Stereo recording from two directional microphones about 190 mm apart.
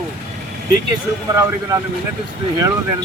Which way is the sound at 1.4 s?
15° right (ahead or behind).